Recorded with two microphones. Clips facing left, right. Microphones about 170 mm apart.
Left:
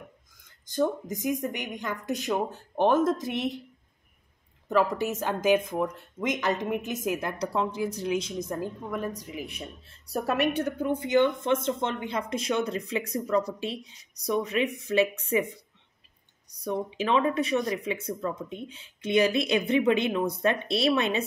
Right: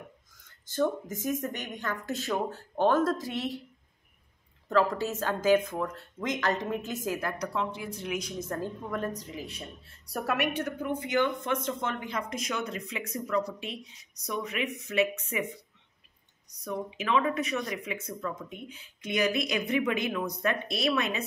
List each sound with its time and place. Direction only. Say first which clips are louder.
0.7 s speech: left 2 dB; 15° left (ahead or behind)
4.6 s speech: left 1 dB; 15° left (ahead or behind); by 8.2 s 40° left (ahead or behind)
8.2 s speech: left 2 dB; 15° left (ahead or behind)
10.1 s a woman's voice: left 4 dB; 30° left (ahead or behind)
16.6 s speech: left 4 dB; 30° left (ahead or behind)